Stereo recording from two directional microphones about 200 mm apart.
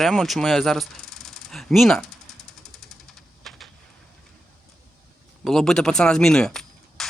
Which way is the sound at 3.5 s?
Centre (ahead or behind).